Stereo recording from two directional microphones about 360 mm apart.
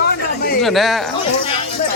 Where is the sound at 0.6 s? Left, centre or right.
Centre.